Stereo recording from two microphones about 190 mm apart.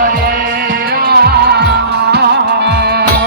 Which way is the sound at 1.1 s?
60° right (ahead or behind).